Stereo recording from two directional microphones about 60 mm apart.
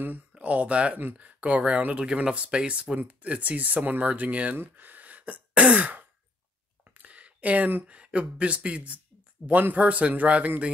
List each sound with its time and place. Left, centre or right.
0.3 s a man's voice: right